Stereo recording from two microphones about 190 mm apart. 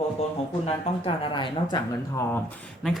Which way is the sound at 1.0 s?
25° left (ahead or behind).